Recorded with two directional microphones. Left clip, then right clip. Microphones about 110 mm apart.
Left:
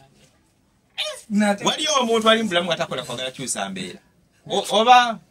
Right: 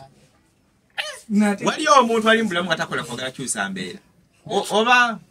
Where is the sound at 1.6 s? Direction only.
15° left (ahead or behind).